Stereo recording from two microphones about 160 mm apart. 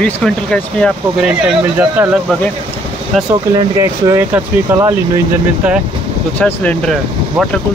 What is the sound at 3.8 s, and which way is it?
Speech, 15° right (ahead or behind).